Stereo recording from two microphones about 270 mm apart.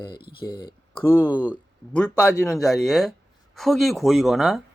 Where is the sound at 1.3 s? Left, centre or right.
Centre.